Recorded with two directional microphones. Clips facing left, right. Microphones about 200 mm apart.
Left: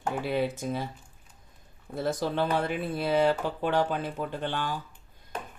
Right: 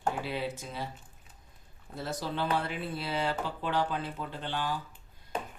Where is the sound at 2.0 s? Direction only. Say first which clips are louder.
Left 6 dB; 50° left (ahead or behind).